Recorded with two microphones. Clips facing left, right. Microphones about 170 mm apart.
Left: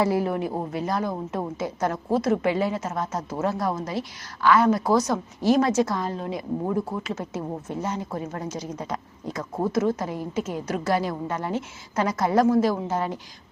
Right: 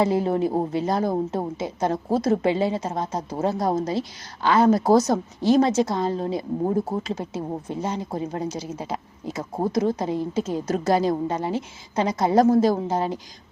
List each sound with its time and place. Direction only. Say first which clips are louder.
0.0 s a woman's voice: right 2 dB; 25° right (ahead or behind); by 4.0 s 40° right (ahead or behind)
4.4 s a woman's voice: right 1 dB; 25° right (ahead or behind)
4.8 s a woman's voice: right 4 dB; 40° right (ahead or behind)
5.5 s a woman's voice: right 2 dB; 25° right (ahead or behind)